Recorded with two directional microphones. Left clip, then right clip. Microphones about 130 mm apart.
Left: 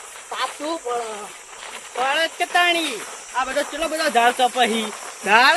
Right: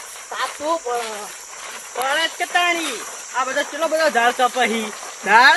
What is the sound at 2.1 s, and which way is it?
Speech, 40° left (ahead or behind).